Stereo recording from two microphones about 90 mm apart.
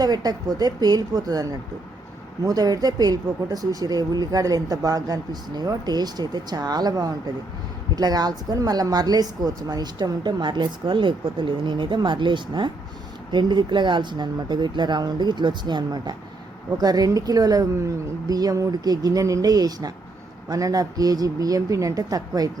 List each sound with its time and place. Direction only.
0.0 s speech: 50° right (ahead or behind)